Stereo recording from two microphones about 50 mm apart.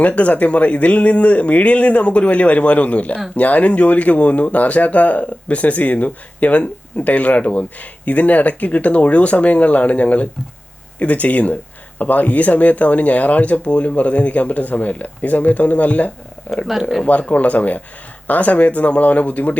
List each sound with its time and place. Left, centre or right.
0.2 s speech: left